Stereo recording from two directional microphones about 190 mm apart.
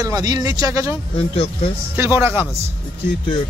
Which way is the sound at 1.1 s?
30° left (ahead or behind).